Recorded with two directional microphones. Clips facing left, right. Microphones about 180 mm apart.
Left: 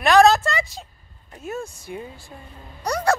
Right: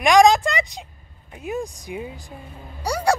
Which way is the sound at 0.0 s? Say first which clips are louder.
Right 1 dB; 15° right (ahead or behind).